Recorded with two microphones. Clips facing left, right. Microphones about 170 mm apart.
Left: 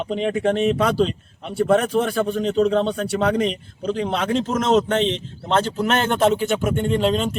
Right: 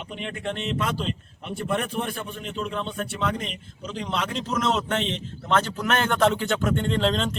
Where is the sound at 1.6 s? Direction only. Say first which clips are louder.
Left 10 dB; 85° left; by 7.3 s 10° left (ahead or behind).